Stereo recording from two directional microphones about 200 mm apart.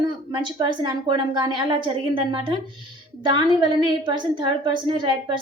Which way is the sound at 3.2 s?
20° right (ahead or behind).